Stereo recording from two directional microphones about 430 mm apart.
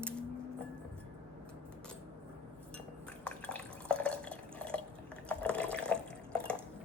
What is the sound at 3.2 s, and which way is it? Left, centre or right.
Drip, centre.